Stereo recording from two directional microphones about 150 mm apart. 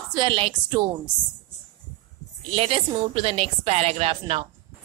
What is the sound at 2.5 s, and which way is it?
A woman's voice, 40° right (ahead or behind).